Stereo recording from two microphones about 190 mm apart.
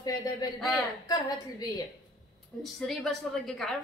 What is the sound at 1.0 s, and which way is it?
Speech, 20° left (ahead or behind).